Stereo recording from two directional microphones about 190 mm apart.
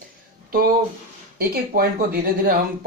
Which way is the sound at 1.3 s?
50° right (ahead or behind).